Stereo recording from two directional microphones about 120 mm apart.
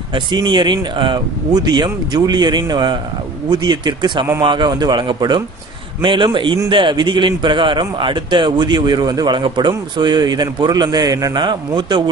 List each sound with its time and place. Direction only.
0.1 s a man's voice: 40° right (ahead or behind)